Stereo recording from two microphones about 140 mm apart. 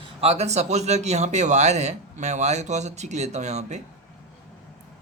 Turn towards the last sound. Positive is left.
turn(degrees=-55)  # may be behind; listen again after turning